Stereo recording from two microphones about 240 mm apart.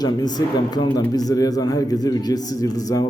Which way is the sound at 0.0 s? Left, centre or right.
Centre.